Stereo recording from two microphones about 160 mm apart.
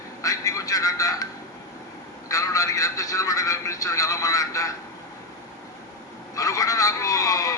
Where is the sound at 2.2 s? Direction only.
20° left (ahead or behind).